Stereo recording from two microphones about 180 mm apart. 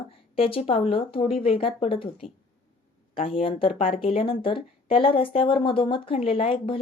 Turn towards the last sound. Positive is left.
turn(degrees=30)  # may be behind; listen again after turning